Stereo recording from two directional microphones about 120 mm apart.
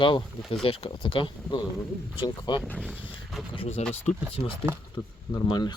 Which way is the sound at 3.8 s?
65° left (ahead or behind).